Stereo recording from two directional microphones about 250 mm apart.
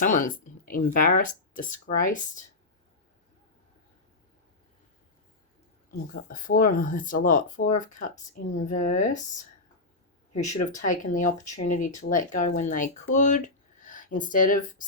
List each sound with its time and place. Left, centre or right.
0.0 s speech: left
5.9 s speech: left
10.6 s speech: left